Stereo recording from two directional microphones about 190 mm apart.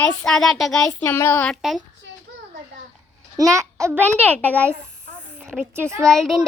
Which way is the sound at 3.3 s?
15° right (ahead or behind).